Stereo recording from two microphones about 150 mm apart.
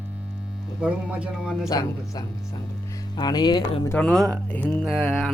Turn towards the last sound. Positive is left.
turn(degrees=10)  # may be behind; listen again after turning